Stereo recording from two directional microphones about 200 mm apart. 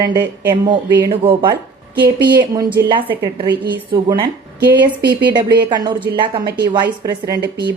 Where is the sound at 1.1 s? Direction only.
25° right (ahead or behind).